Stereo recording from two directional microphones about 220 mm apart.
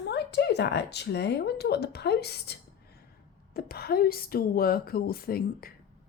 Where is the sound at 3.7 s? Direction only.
45° left (ahead or behind).